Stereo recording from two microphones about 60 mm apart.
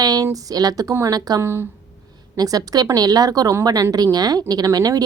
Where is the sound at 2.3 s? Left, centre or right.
Right.